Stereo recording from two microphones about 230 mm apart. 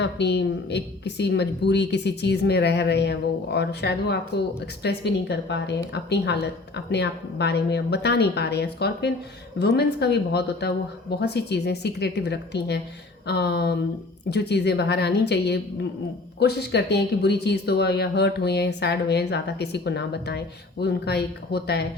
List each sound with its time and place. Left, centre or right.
0.0 s a woman's voice: left